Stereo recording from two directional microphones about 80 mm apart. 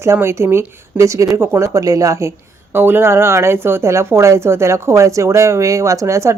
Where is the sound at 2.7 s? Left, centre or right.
Right.